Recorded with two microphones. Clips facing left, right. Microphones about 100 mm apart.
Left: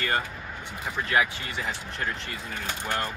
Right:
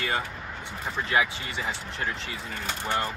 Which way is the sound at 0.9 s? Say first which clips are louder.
Left 1 dB; 20° right (ahead or behind).